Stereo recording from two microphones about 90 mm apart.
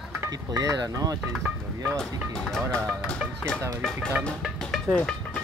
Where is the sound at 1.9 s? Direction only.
5° left (ahead or behind).